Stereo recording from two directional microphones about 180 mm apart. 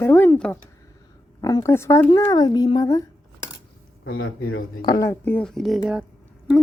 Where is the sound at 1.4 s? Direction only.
20° left (ahead or behind).